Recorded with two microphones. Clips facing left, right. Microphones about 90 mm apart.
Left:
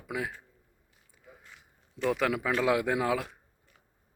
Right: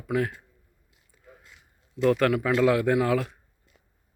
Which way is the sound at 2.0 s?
10° left (ahead or behind).